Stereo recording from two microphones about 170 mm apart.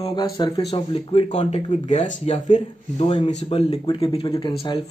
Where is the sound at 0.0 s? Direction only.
25° left (ahead or behind).